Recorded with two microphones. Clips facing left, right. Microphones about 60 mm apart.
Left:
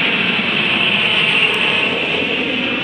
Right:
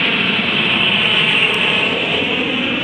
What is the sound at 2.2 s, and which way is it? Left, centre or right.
Train, centre.